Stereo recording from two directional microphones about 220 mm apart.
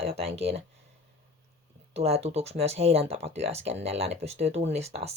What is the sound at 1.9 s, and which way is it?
Speech, 30° right (ahead or behind).